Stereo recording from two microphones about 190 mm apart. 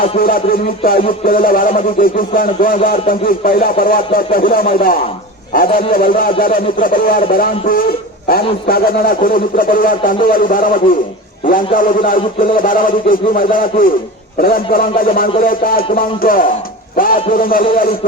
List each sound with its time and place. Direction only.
0.2 s a man's voice: 50° left (ahead or behind)